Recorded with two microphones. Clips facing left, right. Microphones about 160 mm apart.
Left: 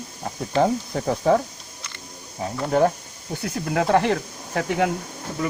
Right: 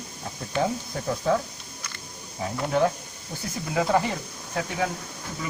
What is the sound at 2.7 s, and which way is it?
Speech, 45° left (ahead or behind).